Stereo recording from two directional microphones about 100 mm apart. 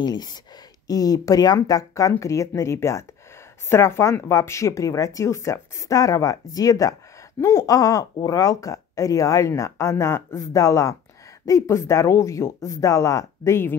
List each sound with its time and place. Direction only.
0.0 s speech: 45° left (ahead or behind); by 13.7 s 25° left (ahead or behind)